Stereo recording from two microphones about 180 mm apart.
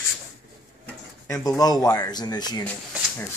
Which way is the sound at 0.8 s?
20° left (ahead or behind).